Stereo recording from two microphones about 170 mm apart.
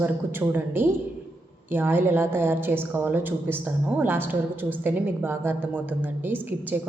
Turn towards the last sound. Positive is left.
turn(degrees=-10)  # may be behind; listen again after turning